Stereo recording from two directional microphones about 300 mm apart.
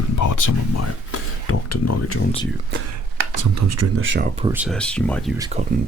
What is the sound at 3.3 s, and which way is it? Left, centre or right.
Speech, right.